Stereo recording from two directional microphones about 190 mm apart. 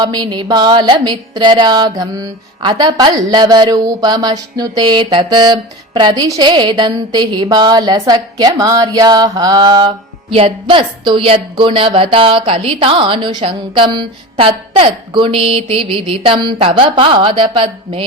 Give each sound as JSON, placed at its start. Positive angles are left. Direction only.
{"t": 0.0, "sound": "music", "side_deg": -25}